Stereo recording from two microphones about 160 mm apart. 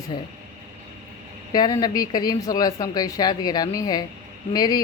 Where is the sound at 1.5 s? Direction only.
25° left (ahead or behind).